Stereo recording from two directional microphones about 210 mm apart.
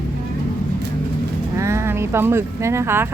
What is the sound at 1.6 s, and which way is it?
Speech, 15° right (ahead or behind).